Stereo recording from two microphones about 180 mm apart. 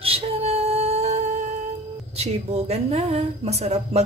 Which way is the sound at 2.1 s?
35° right (ahead or behind).